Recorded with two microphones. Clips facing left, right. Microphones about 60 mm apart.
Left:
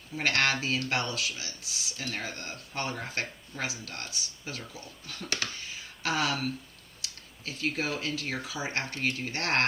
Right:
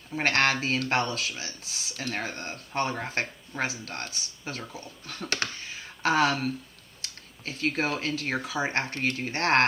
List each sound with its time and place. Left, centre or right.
0.2 s speech: right
5.6 s a sound: right
7.0 s tick-tock: right
8.0 s speech: right